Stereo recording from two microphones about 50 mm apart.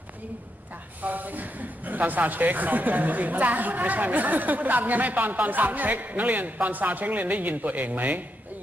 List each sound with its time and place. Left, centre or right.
1.0 s a man's voice: right